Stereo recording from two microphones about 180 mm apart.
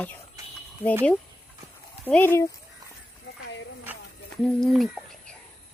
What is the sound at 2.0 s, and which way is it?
Speech, 10° left (ahead or behind).